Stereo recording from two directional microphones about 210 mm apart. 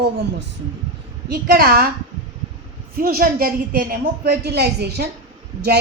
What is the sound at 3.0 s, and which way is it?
A woman's voice, 45° right (ahead or behind).